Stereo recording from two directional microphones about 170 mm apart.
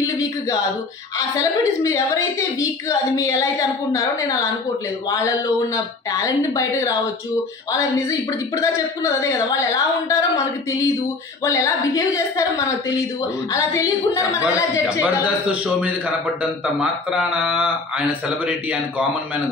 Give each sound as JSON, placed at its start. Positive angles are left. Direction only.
{"t": 0.0, "sound": "a sound", "side_deg": 20}
{"t": 1.1, "sound": "a woman's voice", "side_deg": 20}
{"t": 6.1, "sound": "a woman's voice", "side_deg": 20}
{"t": 8.1, "sound": "a woman's voice", "side_deg": 15}
{"t": 11.4, "sound": "a woman's voice", "side_deg": 20}
{"t": 15.0, "sound": "a man's voice", "side_deg": -5}